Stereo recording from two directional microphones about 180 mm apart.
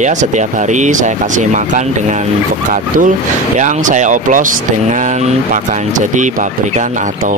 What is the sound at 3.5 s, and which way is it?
Speech, 45° right (ahead or behind).